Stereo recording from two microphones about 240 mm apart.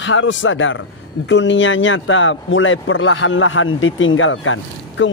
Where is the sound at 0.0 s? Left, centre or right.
Left.